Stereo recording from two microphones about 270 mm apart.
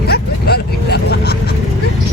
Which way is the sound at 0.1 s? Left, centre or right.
Left.